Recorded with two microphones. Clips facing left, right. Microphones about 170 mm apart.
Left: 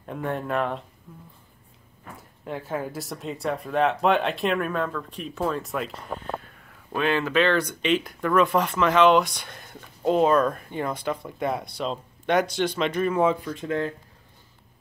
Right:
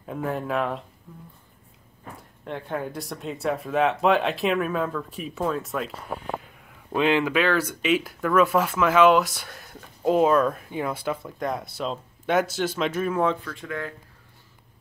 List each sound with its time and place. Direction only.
0.0 s speech: centre (ahead or behind)
2.4 s speech: 5° left (ahead or behind)
6.1 s speech: 15° right (ahead or behind); by 13.4 s 5° left (ahead or behind)
13.4 s speech: 20° left (ahead or behind)